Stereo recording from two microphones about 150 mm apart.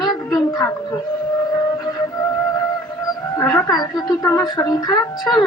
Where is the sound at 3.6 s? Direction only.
25° left (ahead or behind).